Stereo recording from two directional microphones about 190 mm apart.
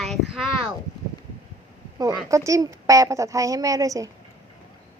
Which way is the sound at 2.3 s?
15° right (ahead or behind).